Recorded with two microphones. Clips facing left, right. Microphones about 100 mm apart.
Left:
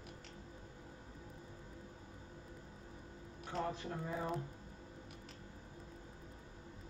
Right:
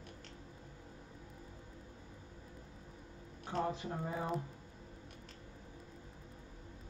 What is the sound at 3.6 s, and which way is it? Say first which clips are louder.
Speech: right 3 dB; 20° right (ahead or behind).